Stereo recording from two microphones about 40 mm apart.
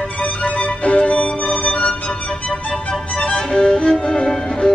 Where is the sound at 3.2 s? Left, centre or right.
Left.